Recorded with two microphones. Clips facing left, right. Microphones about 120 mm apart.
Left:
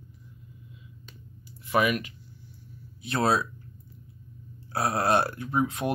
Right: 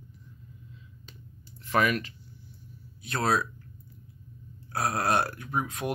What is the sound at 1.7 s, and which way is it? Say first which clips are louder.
Speech: left 1 dB; 10° left (ahead or behind).